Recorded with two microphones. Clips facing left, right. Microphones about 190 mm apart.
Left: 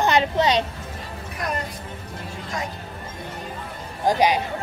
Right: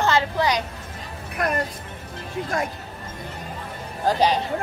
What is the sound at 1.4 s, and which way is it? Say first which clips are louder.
Speech: right 4 dB; 60° right (ahead or behind).